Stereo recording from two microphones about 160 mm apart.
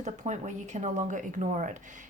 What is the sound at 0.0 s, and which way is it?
Speech, 50° right (ahead or behind).